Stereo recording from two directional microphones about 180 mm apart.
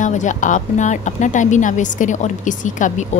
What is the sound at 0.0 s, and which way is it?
A woman's voice, 45° left (ahead or behind).